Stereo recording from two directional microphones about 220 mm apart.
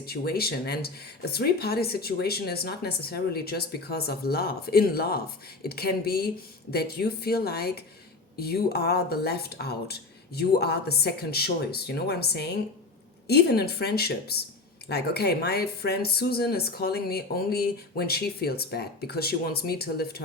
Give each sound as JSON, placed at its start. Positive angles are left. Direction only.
{"t": 0.0, "sound": "speech", "side_deg": 45}